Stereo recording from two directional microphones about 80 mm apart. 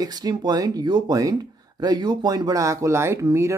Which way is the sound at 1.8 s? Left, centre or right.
Right.